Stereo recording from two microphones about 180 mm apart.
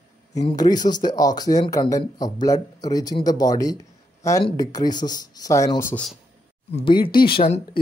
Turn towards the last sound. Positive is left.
turn(degrees=35)  # may be behind; listen again after turning